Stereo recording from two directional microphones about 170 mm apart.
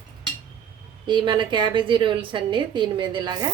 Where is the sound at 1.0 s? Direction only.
25° right (ahead or behind).